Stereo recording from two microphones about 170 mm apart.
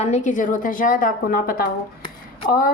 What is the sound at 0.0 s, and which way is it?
A woman's voice, 45° left (ahead or behind).